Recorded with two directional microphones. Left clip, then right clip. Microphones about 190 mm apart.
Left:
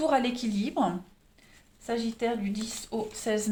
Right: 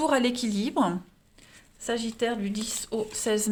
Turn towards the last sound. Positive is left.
turn(degrees=-45)  # may be behind; listen again after turning